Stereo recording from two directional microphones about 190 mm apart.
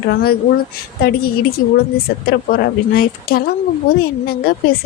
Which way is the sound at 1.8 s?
55° left (ahead or behind).